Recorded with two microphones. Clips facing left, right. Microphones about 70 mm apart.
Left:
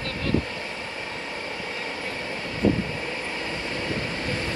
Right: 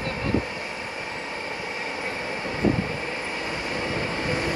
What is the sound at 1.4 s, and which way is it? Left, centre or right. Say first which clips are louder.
Vehicle: right 1 dB; right.